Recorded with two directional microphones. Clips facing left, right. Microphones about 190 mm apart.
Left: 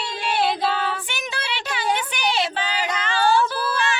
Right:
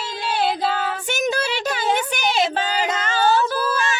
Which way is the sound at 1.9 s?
45° right (ahead or behind).